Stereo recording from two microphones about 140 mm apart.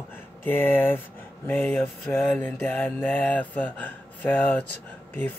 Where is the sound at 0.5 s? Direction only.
15° left (ahead or behind).